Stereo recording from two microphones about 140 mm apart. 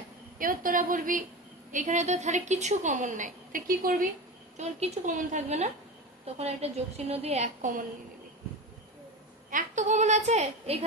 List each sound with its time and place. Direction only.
0.4 s a woman's voice: 75° right (ahead or behind)
4.6 s a woman's voice: 50° right (ahead or behind)
6.2 s a woman's voice: 45° right (ahead or behind)
9.5 s a woman's voice: 65° right (ahead or behind)